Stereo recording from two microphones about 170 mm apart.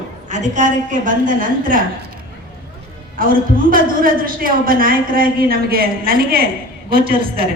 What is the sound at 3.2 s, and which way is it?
A man's voice, 55° right (ahead or behind).